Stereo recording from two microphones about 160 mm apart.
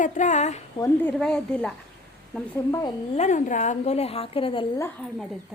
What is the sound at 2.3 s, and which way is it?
Speech, 15° left (ahead or behind).